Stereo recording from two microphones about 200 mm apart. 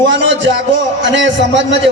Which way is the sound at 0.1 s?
65° right (ahead or behind).